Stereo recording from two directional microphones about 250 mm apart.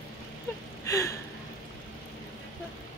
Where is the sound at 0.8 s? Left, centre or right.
Centre.